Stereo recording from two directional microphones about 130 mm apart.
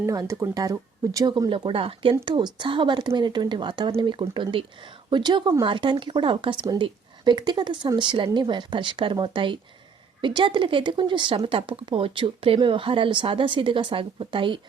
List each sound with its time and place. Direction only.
0.0 s speech: 25° right (ahead or behind); by 14.6 s 40° right (ahead or behind)